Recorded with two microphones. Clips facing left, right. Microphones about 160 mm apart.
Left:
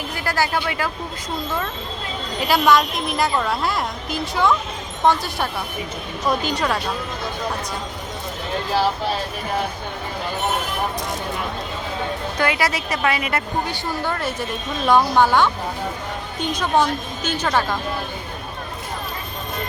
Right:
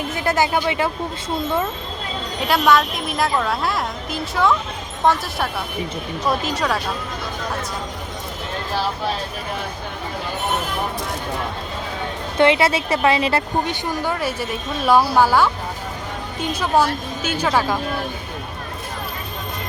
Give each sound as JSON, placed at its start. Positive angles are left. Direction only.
{"t": 0.1, "sound": "speech", "side_deg": -20}
{"t": 2.4, "sound": "a woman's voice", "side_deg": 0}
{"t": 12.4, "sound": "a woman's voice", "side_deg": -25}
{"t": 14.0, "sound": "a woman's voice", "side_deg": -10}